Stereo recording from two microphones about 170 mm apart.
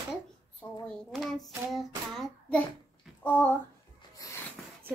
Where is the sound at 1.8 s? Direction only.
Centre (ahead or behind).